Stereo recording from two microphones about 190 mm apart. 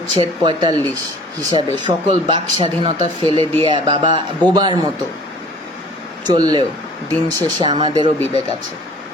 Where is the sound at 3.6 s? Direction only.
25° right (ahead or behind).